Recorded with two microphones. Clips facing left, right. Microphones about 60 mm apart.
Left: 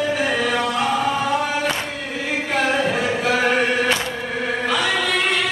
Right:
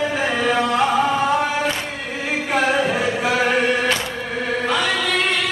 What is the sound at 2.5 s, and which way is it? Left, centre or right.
Chant, centre.